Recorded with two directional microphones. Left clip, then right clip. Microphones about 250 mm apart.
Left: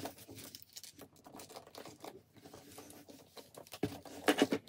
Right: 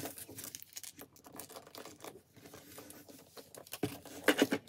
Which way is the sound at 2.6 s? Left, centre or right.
Centre.